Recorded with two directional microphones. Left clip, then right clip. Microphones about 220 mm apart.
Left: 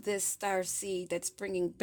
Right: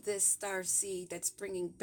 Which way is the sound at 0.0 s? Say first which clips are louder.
Left 2 dB; 30° left (ahead or behind).